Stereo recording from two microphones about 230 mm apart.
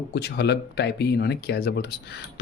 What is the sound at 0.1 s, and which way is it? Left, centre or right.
Speech, left.